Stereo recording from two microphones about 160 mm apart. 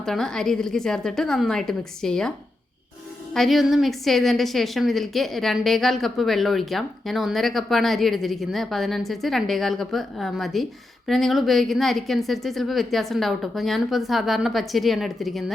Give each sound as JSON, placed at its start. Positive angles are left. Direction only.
{"t": 0.0, "sound": "a woman's voice", "side_deg": 5}
{"t": 3.3, "sound": "a woman's voice", "side_deg": 0}